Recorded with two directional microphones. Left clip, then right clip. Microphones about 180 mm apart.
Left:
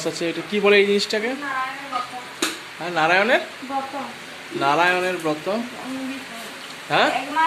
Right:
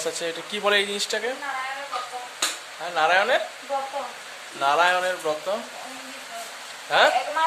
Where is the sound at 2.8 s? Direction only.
Centre (ahead or behind).